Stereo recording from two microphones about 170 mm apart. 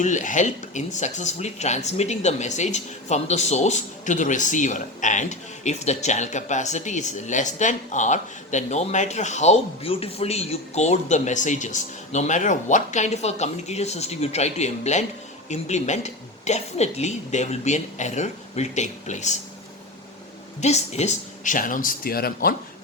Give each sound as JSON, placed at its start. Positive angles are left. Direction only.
{"t": 0.0, "sound": "speech", "side_deg": 45}
{"t": 20.6, "sound": "speech", "side_deg": 40}